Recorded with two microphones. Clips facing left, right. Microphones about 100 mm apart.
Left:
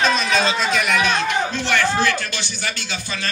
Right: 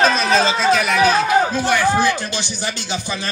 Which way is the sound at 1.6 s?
15° right (ahead or behind).